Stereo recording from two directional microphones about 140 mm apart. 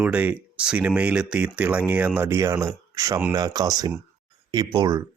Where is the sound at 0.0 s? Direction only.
10° right (ahead or behind).